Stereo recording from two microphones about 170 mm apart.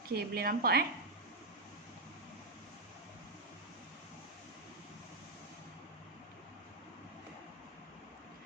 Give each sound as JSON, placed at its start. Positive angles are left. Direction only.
{"t": 0.1, "sound": "a woman's voice", "side_deg": -65}